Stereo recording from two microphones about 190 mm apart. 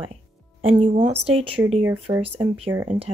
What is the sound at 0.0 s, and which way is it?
Music, 30° right (ahead or behind).